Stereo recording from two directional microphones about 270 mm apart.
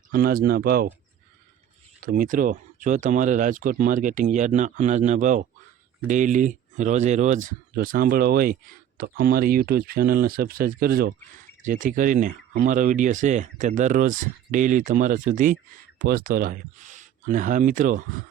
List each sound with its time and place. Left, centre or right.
0.1 s speech: right
2.0 s speech: right